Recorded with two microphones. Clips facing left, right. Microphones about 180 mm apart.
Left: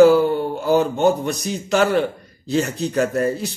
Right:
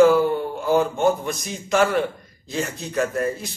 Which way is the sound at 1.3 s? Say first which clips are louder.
Left 2 dB; 35° left (ahead or behind).